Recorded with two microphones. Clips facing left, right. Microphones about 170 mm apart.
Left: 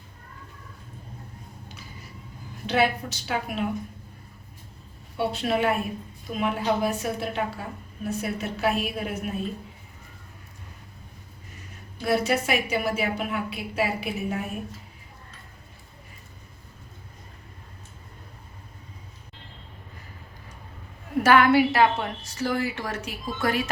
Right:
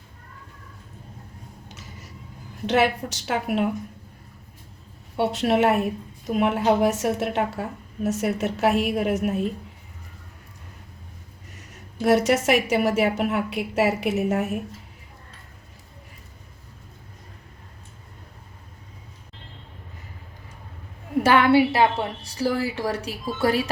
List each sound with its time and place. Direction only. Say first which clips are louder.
1.6 s a sound: right 1 dB; 75° right (ahead or behind)
2.6 s a woman's voice: right 3 dB; 75° right (ahead or behind)
5.1 s a woman's voice: right 4 dB; 75° right (ahead or behind)
11.5 s a woman's voice: right 8 dB; 75° right (ahead or behind)
21.2 s a woman's voice: right 1 dB; 30° right (ahead or behind)